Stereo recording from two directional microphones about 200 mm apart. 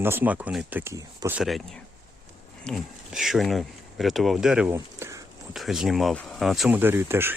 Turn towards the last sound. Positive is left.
turn(degrees=-10)  # may be behind; listen again after turning